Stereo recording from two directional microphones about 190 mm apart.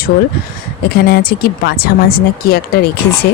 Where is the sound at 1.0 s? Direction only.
55° left (ahead or behind).